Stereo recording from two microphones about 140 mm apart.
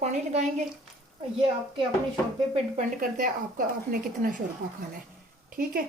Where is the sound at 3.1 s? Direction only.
75° right (ahead or behind).